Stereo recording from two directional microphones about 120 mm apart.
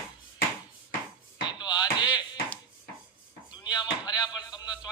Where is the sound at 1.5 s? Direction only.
40° left (ahead or behind).